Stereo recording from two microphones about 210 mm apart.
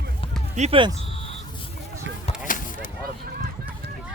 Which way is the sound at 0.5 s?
30° right (ahead or behind).